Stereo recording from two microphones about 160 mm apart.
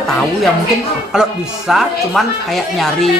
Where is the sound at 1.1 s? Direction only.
5° right (ahead or behind).